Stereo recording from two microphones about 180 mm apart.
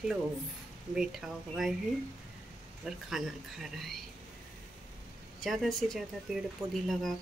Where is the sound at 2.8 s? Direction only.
Centre (ahead or behind).